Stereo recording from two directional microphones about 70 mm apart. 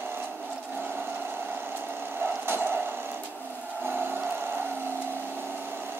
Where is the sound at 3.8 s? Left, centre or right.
Right.